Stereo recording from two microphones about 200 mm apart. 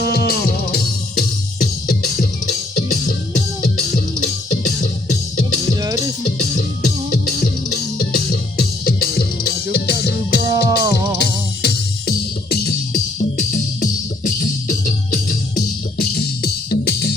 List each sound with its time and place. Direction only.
0.0 s music: 50° left (ahead or behind)
5.7 s music: 20° right (ahead or behind)
7.1 s music: 45° left (ahead or behind)
10.4 s music: 15° right (ahead or behind)
11.6 s music: 50° left (ahead or behind)